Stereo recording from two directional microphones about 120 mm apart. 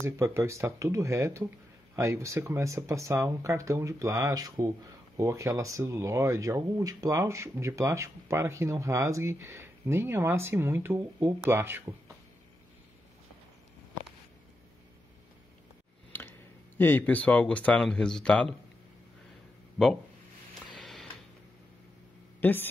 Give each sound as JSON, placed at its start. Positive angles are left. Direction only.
{"t": 0.0, "sound": "speech", "side_deg": -25}
{"t": 16.1, "sound": "speech", "side_deg": 15}
{"t": 20.7, "sound": "music", "side_deg": 0}
{"t": 22.4, "sound": "speech", "side_deg": 15}